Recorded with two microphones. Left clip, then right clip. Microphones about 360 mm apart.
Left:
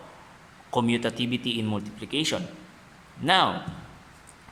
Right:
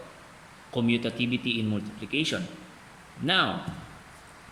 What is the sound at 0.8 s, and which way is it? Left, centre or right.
Speech, centre.